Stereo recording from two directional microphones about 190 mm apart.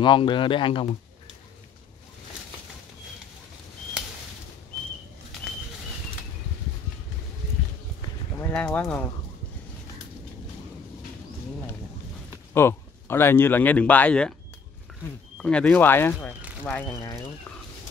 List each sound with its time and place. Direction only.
0.0 s speech: 25° left (ahead or behind)
8.4 s speech: 10° left (ahead or behind)
12.5 s speech: 15° left (ahead or behind)
15.3 s speech: 5° left (ahead or behind)